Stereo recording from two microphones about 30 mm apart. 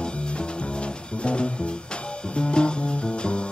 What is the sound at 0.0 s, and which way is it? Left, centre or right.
Music, left.